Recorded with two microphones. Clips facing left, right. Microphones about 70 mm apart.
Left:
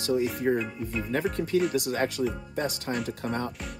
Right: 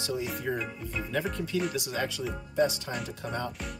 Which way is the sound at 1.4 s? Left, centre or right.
Left.